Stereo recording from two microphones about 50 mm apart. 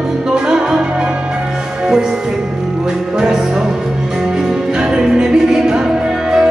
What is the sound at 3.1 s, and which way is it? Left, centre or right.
Music, centre.